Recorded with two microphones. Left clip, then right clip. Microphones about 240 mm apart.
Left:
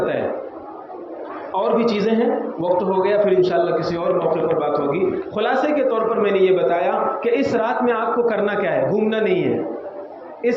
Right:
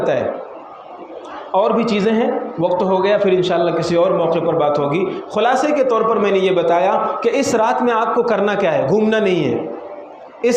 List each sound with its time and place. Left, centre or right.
1.5 s a man's voice: right